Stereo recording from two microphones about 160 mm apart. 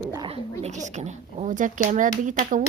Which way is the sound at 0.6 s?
50° right (ahead or behind).